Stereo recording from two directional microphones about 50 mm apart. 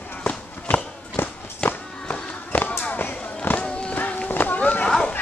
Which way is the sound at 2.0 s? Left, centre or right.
Left.